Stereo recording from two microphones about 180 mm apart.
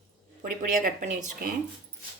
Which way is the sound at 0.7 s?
45° right (ahead or behind).